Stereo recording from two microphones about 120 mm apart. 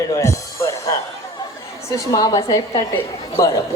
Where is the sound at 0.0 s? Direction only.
25° left (ahead or behind).